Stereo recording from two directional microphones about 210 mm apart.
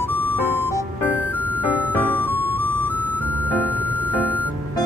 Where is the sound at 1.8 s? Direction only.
10° left (ahead or behind).